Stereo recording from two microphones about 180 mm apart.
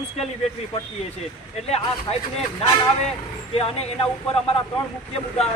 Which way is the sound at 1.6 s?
35° left (ahead or behind).